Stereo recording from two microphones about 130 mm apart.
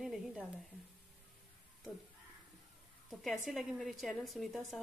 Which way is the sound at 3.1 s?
Centre (ahead or behind).